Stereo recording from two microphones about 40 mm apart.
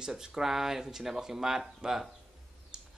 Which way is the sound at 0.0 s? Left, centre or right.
Centre.